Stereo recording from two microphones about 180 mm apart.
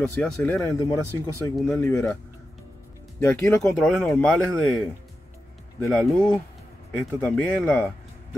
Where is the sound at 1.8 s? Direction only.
15° left (ahead or behind).